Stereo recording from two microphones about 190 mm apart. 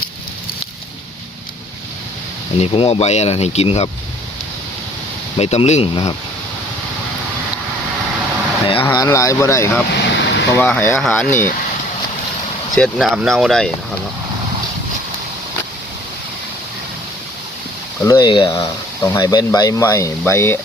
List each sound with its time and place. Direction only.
2.6 s speech: 30° left (ahead or behind)
5.4 s speech: 35° left (ahead or behind)
8.6 s speech: 30° left (ahead or behind)
9.9 s vehicle: 65° left (ahead or behind)
10.6 s speech: 10° left (ahead or behind)
12.7 s speech: centre (ahead or behind)
18.0 s speech: 20° left (ahead or behind)